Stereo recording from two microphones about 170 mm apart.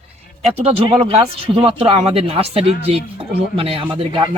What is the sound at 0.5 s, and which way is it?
Speech, 35° right (ahead or behind).